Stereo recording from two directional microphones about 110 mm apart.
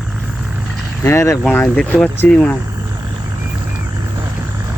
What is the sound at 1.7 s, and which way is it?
Speech, 10° left (ahead or behind).